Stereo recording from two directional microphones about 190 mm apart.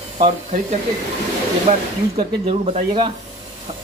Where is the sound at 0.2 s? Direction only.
35° right (ahead or behind).